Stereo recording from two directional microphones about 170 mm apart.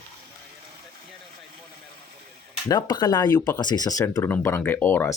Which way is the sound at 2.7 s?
25° left (ahead or behind).